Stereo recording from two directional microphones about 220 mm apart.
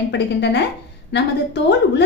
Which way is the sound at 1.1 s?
50° left (ahead or behind).